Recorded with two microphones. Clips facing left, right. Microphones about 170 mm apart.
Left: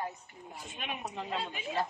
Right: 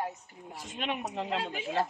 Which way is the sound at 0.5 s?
80° right.